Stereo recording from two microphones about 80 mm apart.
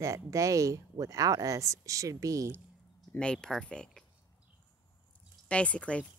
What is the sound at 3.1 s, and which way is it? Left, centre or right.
Speech, centre.